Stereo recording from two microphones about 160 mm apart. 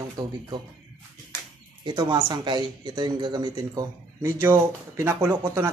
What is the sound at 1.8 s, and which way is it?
Speech, 25° right (ahead or behind).